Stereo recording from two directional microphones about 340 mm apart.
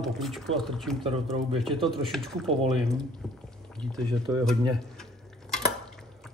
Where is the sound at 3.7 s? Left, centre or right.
Centre.